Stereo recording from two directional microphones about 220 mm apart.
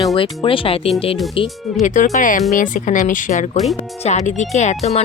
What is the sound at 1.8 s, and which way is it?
Speech, 35° left (ahead or behind).